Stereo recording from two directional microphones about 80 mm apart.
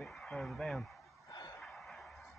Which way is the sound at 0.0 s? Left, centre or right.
Centre.